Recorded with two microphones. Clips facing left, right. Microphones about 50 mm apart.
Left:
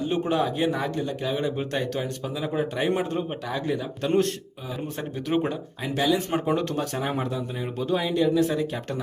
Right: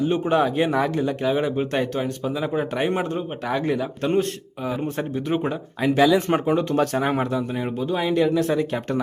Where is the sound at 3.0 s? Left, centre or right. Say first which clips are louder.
Right 2 dB; centre.